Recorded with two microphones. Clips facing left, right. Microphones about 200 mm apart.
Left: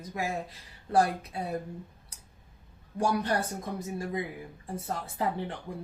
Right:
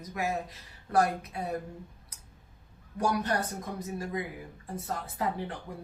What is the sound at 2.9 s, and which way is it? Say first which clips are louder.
Speech: left 1 dB; 30° left (ahead or behind).